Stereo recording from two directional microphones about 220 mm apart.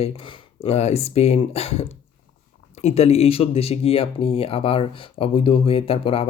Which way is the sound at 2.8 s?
30° left (ahead or behind).